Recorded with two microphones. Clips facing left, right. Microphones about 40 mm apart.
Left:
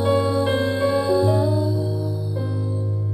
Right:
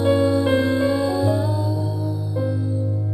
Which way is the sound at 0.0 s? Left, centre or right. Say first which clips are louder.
Right 2 dB; centre.